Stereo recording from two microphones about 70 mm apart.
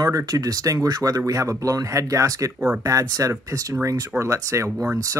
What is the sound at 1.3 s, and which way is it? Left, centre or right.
Speech, right.